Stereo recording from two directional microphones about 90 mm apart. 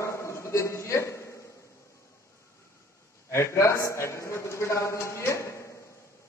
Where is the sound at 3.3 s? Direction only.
30° left (ahead or behind).